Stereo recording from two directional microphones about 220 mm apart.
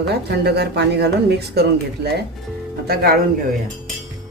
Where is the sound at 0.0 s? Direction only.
50° right (ahead or behind).